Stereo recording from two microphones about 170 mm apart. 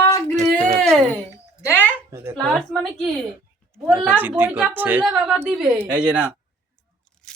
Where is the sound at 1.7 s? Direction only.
10° left (ahead or behind).